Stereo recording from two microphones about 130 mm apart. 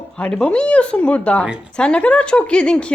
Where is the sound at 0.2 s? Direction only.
10° left (ahead or behind).